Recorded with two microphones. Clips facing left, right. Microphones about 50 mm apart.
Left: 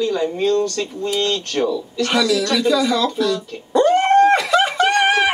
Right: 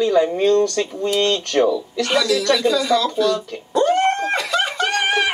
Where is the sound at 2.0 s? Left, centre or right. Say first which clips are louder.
Even; centre.